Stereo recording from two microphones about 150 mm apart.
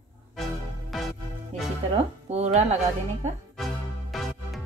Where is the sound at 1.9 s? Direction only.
45° right (ahead or behind).